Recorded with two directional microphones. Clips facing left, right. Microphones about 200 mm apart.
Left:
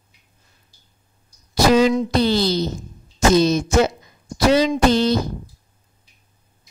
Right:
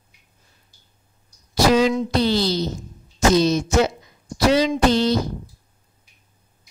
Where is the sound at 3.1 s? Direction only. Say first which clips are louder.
Left 1 dB; 50° left (ahead or behind).